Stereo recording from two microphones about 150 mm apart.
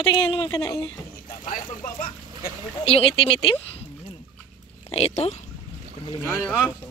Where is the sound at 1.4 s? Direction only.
65° left (ahead or behind).